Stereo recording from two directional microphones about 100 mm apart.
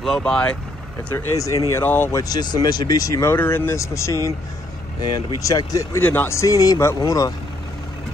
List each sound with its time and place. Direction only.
0.0 s speech: 5° left (ahead or behind)
1.1 s speech: 30° left (ahead or behind)
2.2 s speech: 40° left (ahead or behind)
5.4 s speech: 35° left (ahead or behind)
5.9 s speech: 20° left (ahead or behind); by 7.3 s 35° left (ahead or behind)